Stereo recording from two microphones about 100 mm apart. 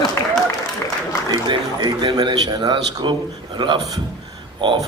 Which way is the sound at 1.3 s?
50° right (ahead or behind).